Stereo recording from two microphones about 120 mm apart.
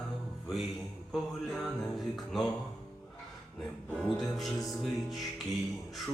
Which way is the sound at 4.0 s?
5° left (ahead or behind).